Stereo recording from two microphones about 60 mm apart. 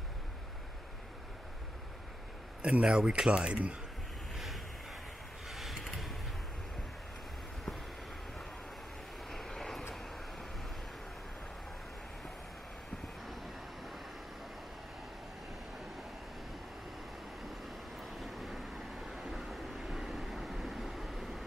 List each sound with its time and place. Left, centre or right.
2.6 s speech: centre
5.5 s a sound: centre
9.3 s vehicle: centre
17.9 s vehicle: centre
19.1 s train: centre